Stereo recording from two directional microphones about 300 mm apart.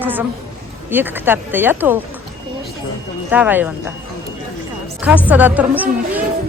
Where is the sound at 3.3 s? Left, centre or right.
Centre.